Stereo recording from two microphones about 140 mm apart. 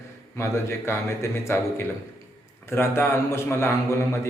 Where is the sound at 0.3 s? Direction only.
20° left (ahead or behind).